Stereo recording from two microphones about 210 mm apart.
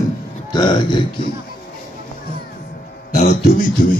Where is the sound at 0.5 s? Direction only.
20° left (ahead or behind).